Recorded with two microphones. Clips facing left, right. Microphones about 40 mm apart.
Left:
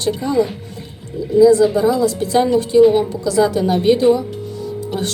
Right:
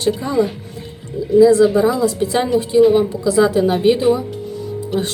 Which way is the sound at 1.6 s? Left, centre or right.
Centre.